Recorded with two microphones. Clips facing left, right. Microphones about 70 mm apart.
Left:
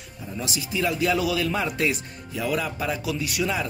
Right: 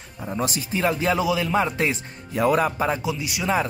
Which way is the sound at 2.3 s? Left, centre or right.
Right.